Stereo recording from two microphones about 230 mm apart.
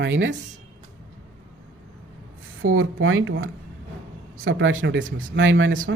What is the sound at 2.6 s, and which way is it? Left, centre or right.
Speech, right.